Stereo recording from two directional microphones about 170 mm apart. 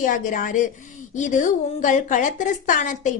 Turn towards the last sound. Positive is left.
turn(degrees=50)  # may be behind; listen again after turning